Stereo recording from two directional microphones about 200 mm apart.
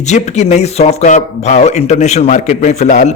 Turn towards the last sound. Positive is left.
turn(degrees=40)  # may be behind; listen again after turning